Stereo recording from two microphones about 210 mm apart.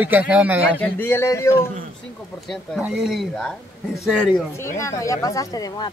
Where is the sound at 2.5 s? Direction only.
Centre (ahead or behind).